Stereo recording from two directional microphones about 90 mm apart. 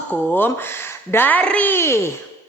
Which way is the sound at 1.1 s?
20° left (ahead or behind).